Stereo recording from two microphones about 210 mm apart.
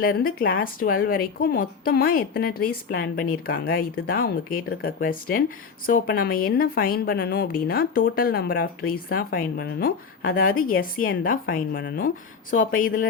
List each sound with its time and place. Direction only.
0.0 s a woman's voice: 45° left (ahead or behind)